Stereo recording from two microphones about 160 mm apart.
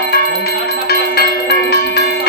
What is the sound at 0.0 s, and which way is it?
Bell, 75° left (ahead or behind).